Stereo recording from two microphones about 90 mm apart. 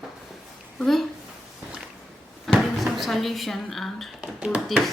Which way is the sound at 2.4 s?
Centre (ahead or behind).